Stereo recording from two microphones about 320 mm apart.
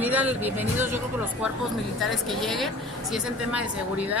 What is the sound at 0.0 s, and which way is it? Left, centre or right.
Speech, centre.